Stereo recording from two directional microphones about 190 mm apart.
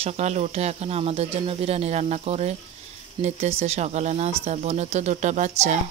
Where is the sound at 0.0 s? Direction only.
35° right (ahead or behind).